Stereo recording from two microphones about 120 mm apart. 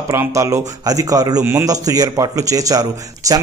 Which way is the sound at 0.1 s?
25° right (ahead or behind).